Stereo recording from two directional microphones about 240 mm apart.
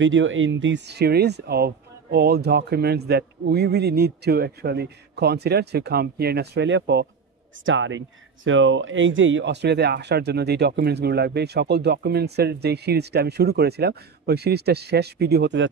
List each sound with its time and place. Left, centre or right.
0.0 s speech: right